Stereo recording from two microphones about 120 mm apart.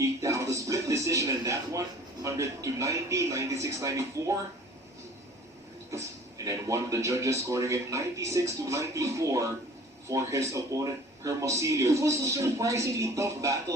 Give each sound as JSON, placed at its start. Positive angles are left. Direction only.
{"t": 0.0, "sound": "a man's voice", "side_deg": -25}
{"t": 6.4, "sound": "speech", "side_deg": -25}